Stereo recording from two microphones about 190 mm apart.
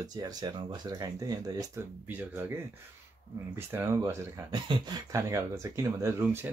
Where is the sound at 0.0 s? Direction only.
20° right (ahead or behind).